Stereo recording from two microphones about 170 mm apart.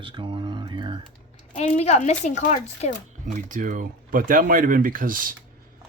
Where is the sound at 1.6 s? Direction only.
40° left (ahead or behind).